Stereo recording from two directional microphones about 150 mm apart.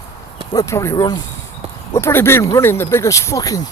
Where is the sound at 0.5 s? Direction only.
20° left (ahead or behind).